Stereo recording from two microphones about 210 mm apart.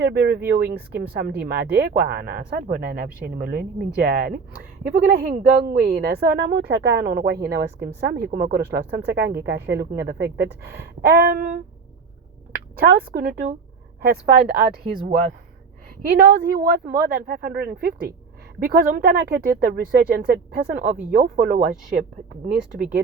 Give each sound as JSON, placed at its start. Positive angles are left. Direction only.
{"t": 0.0, "sound": "speech", "side_deg": -50}
{"t": 16.0, "sound": "speech", "side_deg": -50}